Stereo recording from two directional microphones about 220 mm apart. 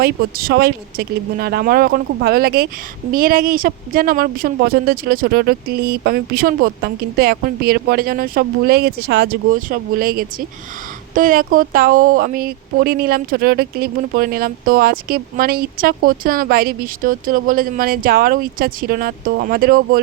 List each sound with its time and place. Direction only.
0.0 s speech: 40° right (ahead or behind)